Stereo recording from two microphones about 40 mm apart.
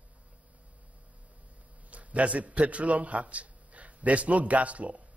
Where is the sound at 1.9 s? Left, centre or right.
Right.